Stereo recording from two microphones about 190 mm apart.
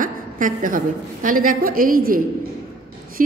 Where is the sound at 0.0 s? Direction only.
45° right (ahead or behind).